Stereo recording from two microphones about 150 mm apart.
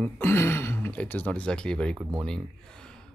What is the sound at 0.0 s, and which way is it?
Speech, 15° left (ahead or behind).